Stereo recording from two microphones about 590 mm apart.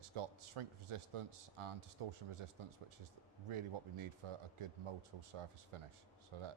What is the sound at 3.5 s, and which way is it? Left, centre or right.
A man's voice, right.